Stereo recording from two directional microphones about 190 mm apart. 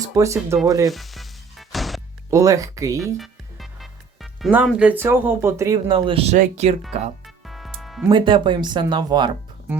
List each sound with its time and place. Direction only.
0.2 s speech: 15° right (ahead or behind)
0.9 s music: centre (ahead or behind)
2.3 s speech: 15° right (ahead or behind)
3.2 s speech: centre (ahead or behind); by 6.7 s 40° right (ahead or behind)
7.3 s music: centre (ahead or behind)
8.1 s speech: 25° right (ahead or behind)